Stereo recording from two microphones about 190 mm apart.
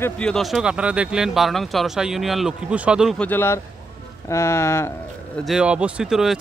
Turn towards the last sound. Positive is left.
turn(degrees=-5)  # may be behind; listen again after turning